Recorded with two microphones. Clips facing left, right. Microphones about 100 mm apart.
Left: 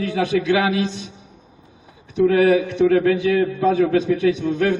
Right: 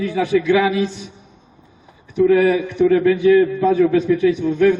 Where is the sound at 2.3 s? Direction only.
60° left (ahead or behind).